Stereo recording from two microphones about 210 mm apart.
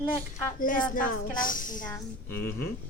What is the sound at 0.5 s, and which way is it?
A woman's voice, 40° left (ahead or behind).